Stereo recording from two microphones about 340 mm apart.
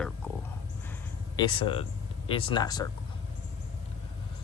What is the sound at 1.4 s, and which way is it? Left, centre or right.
Speech, centre.